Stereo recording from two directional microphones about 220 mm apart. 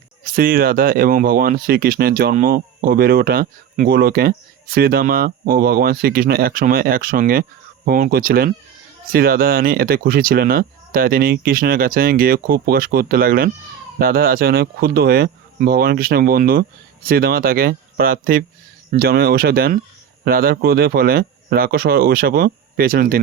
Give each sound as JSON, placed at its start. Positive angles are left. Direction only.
{"t": 0.3, "sound": "speech", "side_deg": -40}